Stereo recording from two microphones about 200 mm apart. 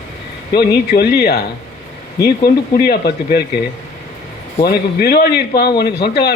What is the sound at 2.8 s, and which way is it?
Speech, 50° left (ahead or behind).